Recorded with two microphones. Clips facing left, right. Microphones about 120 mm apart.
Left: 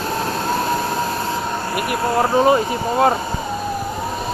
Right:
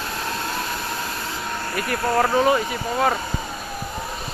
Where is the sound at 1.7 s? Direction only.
15° left (ahead or behind).